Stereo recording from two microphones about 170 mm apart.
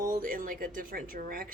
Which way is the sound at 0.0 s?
55° right (ahead or behind).